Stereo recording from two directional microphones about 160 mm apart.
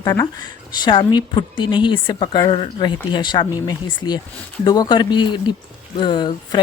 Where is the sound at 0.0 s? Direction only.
20° left (ahead or behind).